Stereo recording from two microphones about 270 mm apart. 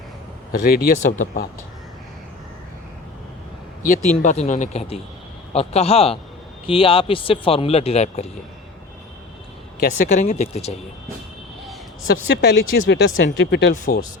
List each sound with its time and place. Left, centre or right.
0.5 s speech: left
3.8 s speech: left
9.8 s speech: left
12.1 s speech: left